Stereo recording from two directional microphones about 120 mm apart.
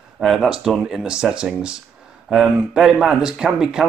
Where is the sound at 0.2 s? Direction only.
Centre (ahead or behind).